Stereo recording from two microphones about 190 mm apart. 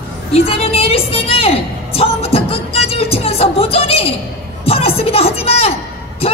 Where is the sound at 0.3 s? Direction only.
30° left (ahead or behind).